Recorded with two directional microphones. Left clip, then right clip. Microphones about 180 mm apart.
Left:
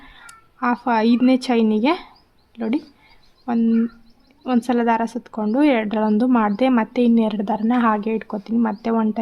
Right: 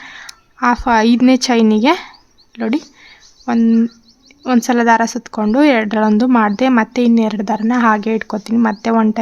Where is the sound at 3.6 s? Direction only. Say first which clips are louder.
Right 5 dB; 40° right (ahead or behind).